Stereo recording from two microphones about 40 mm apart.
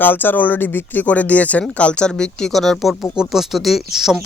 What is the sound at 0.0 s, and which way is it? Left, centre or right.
Speech, left.